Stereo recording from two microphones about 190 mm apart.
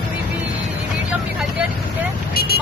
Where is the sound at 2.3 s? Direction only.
55° left (ahead or behind).